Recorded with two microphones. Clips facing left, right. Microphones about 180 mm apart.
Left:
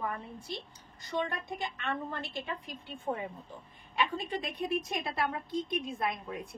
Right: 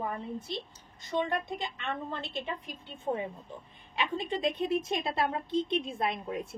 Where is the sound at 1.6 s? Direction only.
20° right (ahead or behind).